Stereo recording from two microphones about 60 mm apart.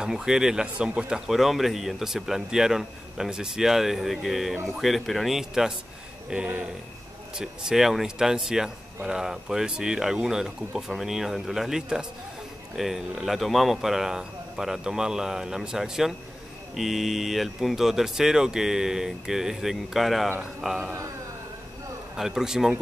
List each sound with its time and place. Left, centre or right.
0.0 s speech: centre
22.1 s speech: centre